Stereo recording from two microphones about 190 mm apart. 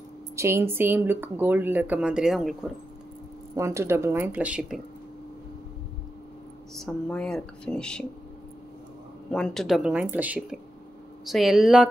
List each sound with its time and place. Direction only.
0.4 s speech: 10° right (ahead or behind)
3.5 s speech: 15° right (ahead or behind)
6.7 s speech: 5° left (ahead or behind)
9.3 s speech: centre (ahead or behind)